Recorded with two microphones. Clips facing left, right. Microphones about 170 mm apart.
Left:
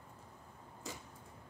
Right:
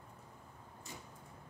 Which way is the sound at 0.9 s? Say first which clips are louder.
Left 5 dB; 90° left.